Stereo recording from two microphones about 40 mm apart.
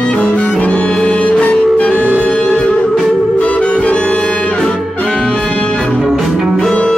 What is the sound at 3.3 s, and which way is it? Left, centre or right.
Music, left.